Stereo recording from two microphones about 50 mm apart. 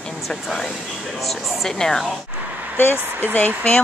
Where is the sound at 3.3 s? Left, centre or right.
Left.